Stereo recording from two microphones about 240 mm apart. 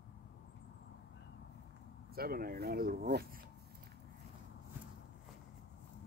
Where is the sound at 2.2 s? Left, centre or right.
Right.